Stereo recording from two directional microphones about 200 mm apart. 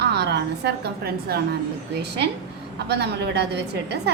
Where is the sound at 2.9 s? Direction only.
55° right (ahead or behind).